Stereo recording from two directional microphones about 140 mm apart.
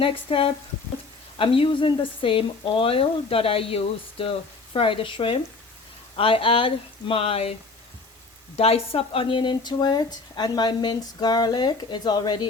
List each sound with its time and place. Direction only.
0.0 s speech: 40° left (ahead or behind)
8.5 s speech: 45° left (ahead or behind)